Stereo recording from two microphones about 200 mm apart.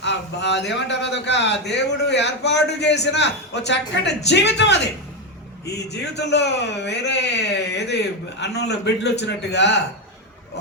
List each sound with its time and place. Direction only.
0.0 s a man's voice: 60° left (ahead or behind)
5.9 s a man's voice: 60° left (ahead or behind)